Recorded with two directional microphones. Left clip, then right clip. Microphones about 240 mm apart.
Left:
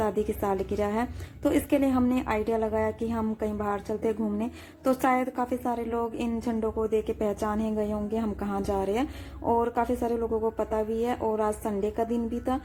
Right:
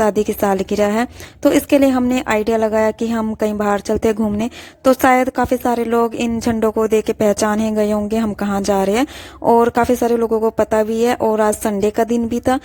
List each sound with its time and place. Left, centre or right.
0.0 s a woman's voice: right